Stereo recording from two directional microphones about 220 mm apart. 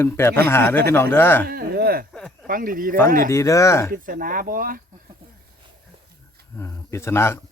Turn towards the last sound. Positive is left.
turn(degrees=10)  # may be behind; listen again after turning